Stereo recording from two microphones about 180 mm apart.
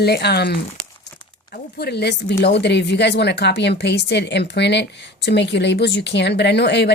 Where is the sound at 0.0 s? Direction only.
65° left (ahead or behind).